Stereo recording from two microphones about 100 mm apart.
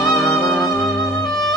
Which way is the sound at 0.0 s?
Centre (ahead or behind).